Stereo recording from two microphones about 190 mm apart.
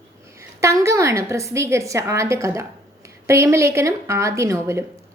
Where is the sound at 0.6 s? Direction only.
15° right (ahead or behind).